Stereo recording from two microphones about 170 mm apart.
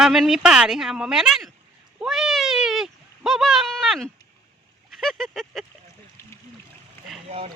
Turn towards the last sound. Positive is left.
turn(degrees=-35)  # may be behind; listen again after turning